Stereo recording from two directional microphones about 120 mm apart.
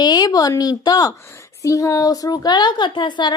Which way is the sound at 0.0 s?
35° left (ahead or behind).